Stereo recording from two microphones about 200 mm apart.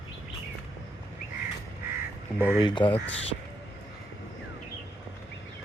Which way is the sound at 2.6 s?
25° left (ahead or behind).